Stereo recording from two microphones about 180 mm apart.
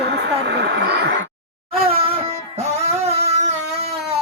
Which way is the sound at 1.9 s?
30° right (ahead or behind).